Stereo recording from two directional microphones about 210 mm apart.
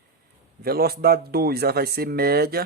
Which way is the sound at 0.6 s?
45° right (ahead or behind).